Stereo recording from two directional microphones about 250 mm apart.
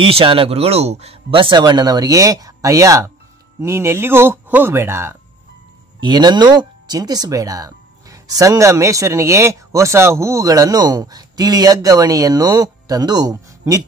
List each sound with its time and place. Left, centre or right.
0.0 s speech: right